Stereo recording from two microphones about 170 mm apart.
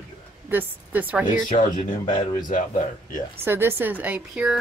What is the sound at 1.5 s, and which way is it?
Speech, 50° left (ahead or behind).